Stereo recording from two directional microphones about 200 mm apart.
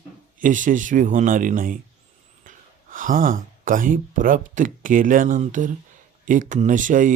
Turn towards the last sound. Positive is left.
turn(degrees=-40)  # may be behind; listen again after turning